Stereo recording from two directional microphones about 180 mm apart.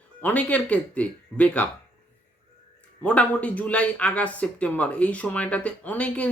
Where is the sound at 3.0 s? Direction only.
10° left (ahead or behind).